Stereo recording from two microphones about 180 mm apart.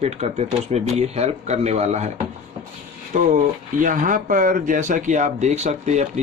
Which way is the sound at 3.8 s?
45° right (ahead or behind).